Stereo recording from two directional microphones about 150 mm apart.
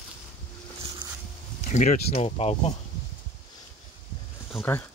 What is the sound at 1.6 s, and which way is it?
Speech, 50° left (ahead or behind).